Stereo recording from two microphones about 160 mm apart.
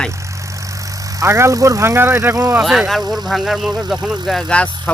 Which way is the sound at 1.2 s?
15° right (ahead or behind).